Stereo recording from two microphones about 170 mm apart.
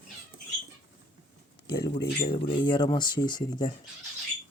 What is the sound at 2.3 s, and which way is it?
Speech, 30° left (ahead or behind).